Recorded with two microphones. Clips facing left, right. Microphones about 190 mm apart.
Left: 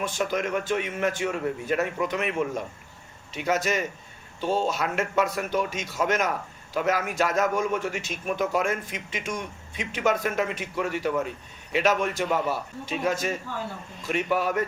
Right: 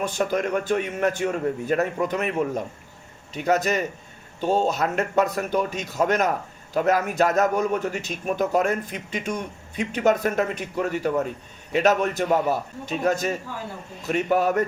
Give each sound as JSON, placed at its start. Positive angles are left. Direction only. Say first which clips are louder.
{"t": 0.2, "sound": "a man's voice", "louder": "right 3 dB", "side_deg": -40}